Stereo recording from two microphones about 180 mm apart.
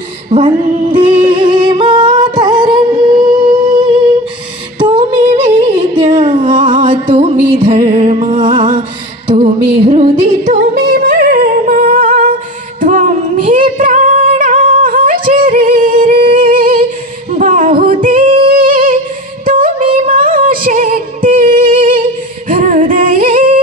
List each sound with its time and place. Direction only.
0.3 s singing: 30° right (ahead or behind)
4.7 s a sound: 30° right (ahead or behind)
6.1 s music: 35° right (ahead or behind)
10.7 s music: 50° right (ahead or behind)
11.3 s humming: 45° right (ahead or behind)
12.8 s female singing: 45° right (ahead or behind)
14.8 s music: 50° right (ahead or behind)
17.3 s female singing: 45° right (ahead or behind)
20.1 s music: 50° right (ahead or behind)
21.4 s singing: 50° right (ahead or behind)